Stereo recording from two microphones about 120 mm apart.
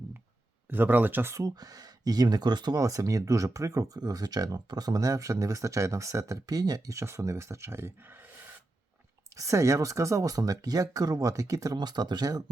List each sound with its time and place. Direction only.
0.7 s speech: 15° right (ahead or behind)
9.3 s speech: 25° right (ahead or behind)